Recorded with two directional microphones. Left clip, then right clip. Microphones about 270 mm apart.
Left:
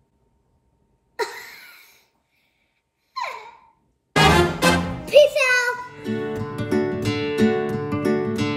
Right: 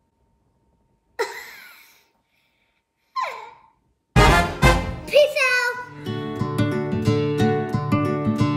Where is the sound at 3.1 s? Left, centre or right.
Centre.